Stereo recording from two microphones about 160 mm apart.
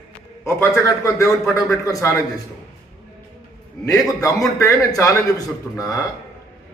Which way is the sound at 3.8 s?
20° left (ahead or behind).